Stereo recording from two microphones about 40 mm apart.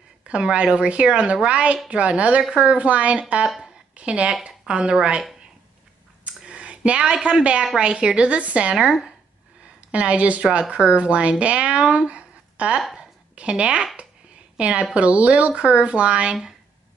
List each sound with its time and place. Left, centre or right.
0.3 s speech: right
6.2 s a sound: right
7.7 s speech: right
9.8 s a woman's voice: right